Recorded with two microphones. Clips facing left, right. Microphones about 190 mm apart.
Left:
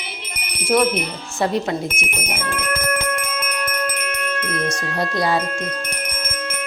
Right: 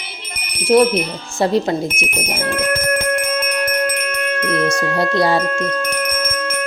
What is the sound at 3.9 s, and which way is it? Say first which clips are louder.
Music: right 4 dB; 60° right (ahead or behind).